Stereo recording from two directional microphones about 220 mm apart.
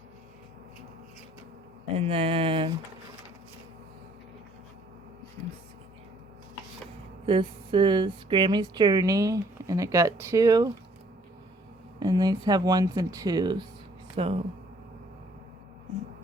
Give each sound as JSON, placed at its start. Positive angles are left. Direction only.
{"t": 2.0, "sound": "speech", "side_deg": -25}
{"t": 7.3, "sound": "speech", "side_deg": -25}
{"t": 11.9, "sound": "speech", "side_deg": -20}